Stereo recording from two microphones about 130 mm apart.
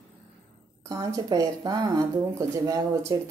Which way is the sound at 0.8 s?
25° right (ahead or behind).